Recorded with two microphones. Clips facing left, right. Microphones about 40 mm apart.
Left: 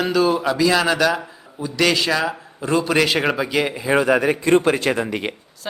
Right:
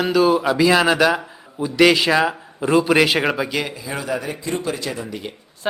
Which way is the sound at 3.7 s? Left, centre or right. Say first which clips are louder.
Left 8 dB; left.